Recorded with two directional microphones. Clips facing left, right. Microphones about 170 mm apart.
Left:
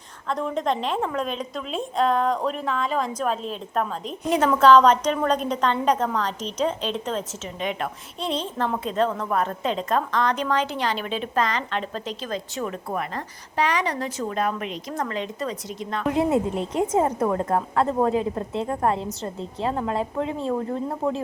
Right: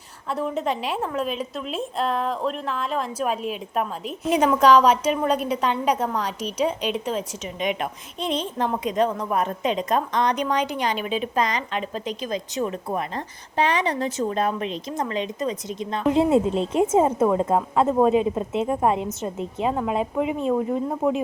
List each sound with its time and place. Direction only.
0.3 s a woman's voice: 5° right (ahead or behind)